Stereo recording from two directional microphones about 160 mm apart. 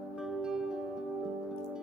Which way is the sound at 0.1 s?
5° right (ahead or behind).